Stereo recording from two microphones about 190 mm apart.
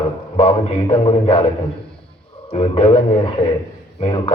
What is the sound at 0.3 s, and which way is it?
A man's voice, 35° left (ahead or behind).